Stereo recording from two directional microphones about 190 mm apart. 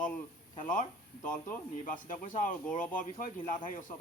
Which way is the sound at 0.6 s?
45° left (ahead or behind).